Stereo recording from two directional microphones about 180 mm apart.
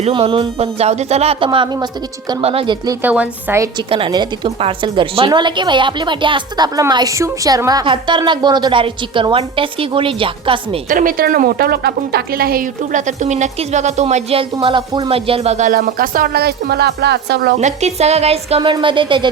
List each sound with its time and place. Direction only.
0.0 s speech: 30° right (ahead or behind)
3.0 s a woman's voice: 10° right (ahead or behind)
3.8 s a woman's voice: 30° right (ahead or behind)
10.8 s a woman's voice: 50° right (ahead or behind)
15.7 s a woman's voice: 50° right (ahead or behind)
17.6 s speech: 40° right (ahead or behind)